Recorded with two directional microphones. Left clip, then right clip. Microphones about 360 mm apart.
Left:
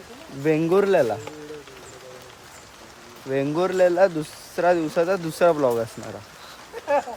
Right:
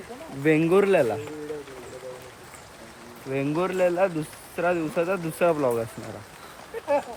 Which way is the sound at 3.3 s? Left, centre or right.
Centre.